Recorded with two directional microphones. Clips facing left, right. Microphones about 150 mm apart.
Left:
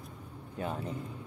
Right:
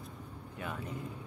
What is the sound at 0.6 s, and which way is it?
Speech, 30° left (ahead or behind).